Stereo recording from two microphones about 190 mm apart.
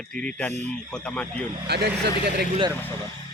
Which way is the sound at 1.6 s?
60° right (ahead or behind).